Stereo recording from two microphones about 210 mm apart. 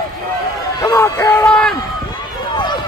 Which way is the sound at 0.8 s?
15° left (ahead or behind).